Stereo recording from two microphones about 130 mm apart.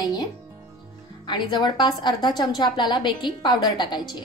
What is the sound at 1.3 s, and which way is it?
Speech, 35° left (ahead or behind).